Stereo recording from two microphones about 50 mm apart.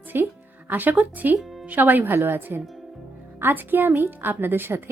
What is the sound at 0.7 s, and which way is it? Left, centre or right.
Speech, right.